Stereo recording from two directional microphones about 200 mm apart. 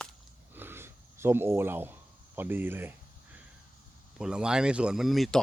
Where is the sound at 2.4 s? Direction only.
10° right (ahead or behind).